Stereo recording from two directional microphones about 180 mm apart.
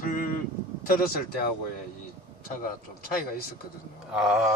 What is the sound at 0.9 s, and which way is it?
Speech, 55° left (ahead or behind).